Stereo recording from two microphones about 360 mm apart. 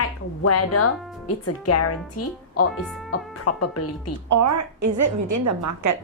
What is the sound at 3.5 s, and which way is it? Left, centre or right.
Speech, left.